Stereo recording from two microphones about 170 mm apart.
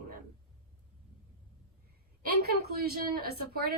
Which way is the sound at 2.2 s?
65° right (ahead or behind).